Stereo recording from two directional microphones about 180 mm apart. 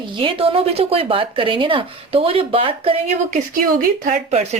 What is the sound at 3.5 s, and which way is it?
Speech, 50° right (ahead or behind).